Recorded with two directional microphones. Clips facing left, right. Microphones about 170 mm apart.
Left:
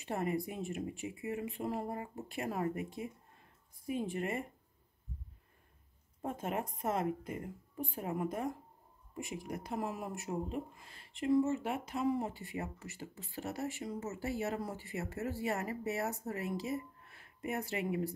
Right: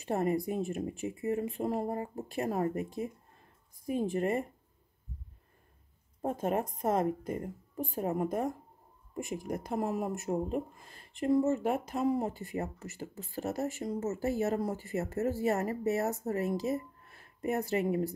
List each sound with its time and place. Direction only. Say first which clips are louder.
0.0 s speech: right 5 dB; 40° right (ahead or behind)
6.2 s speech: right 6 dB; 40° right (ahead or behind)